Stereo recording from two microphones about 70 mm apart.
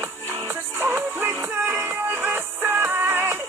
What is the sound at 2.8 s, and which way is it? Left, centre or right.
Music, right.